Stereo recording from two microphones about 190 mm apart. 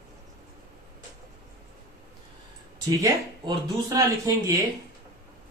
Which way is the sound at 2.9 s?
20° right (ahead or behind).